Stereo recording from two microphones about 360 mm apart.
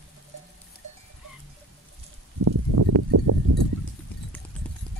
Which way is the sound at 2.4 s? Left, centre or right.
Right.